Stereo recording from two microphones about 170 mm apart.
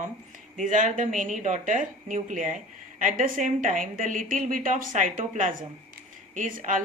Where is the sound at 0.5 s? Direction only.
50° right (ahead or behind).